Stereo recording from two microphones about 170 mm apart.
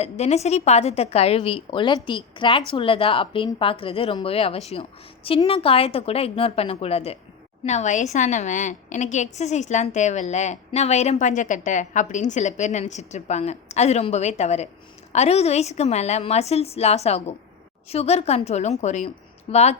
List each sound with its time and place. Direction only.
0.0 s a woman's voice: 40° left (ahead or behind)